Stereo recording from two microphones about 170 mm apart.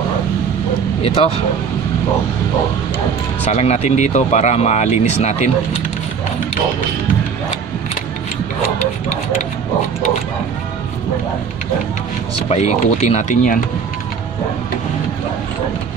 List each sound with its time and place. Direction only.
1.0 s speech: 35° left (ahead or behind)
3.4 s speech: 45° left (ahead or behind)
12.4 s speech: 40° left (ahead or behind)